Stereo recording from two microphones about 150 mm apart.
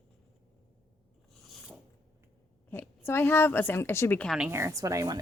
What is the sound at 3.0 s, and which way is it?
A woman's voice, 15° left (ahead or behind).